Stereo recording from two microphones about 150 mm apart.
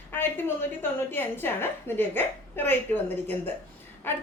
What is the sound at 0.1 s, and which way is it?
A woman's voice, 15° left (ahead or behind).